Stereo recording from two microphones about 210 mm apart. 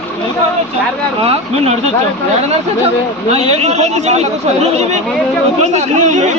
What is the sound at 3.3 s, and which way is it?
Speech, 30° right (ahead or behind).